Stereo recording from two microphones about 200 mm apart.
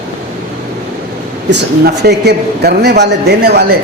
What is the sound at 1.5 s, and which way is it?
A man's voice, 55° right (ahead or behind).